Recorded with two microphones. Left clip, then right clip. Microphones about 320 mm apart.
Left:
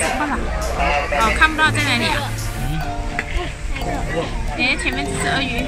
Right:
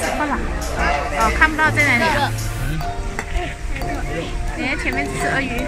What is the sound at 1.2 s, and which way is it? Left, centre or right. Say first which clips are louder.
Speech: even; centre.